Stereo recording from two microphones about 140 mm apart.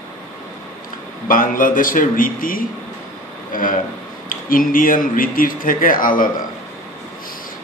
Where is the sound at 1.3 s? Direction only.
80° left.